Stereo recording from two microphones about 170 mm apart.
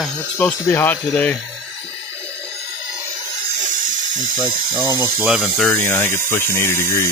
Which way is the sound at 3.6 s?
50° right (ahead or behind).